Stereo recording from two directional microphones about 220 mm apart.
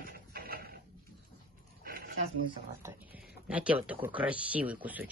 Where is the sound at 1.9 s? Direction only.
45° right (ahead or behind).